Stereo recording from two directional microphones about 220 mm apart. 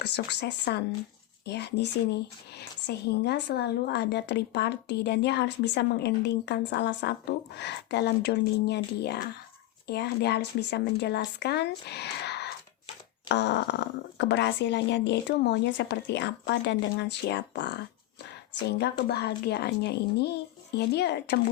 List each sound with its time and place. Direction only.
0.0 s speech: 50° left (ahead or behind)